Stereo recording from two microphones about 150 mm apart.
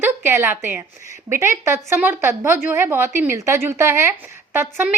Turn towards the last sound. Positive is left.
turn(degrees=-15)  # may be behind; listen again after turning